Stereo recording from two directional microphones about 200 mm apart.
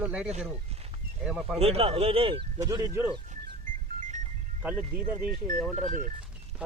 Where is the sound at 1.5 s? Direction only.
30° right (ahead or behind).